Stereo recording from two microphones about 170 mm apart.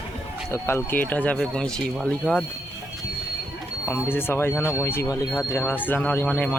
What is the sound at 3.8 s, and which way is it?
Speech, 15° left (ahead or behind).